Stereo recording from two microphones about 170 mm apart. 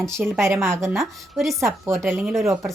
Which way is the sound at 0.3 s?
15° right (ahead or behind).